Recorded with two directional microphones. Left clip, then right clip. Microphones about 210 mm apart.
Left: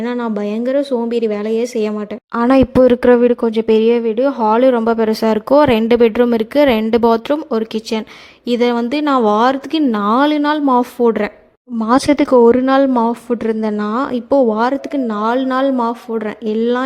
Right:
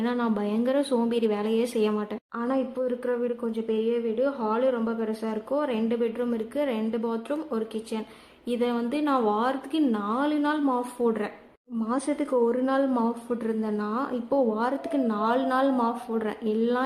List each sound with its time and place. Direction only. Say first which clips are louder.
0.0 s speech: left 8 dB; 30° left (ahead or behind)
2.3 s a woman's voice: left 17 dB; 50° left (ahead or behind)